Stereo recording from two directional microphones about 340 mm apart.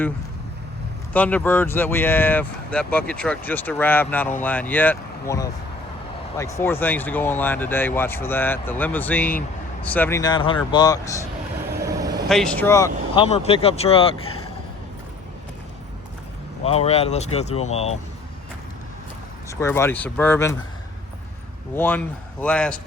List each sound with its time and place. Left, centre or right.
1.1 s speech: centre
11.8 s vehicle: centre
12.3 s speech: centre
16.6 s speech: centre
19.5 s speech: centre
21.8 s speech: centre